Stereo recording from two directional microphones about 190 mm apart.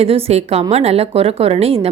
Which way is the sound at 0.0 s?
30° right (ahead or behind).